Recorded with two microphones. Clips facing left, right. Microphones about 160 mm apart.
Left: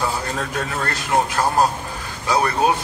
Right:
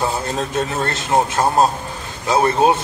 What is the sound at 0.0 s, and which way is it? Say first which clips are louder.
A man's voice: right 3 dB; 25° right (ahead or behind).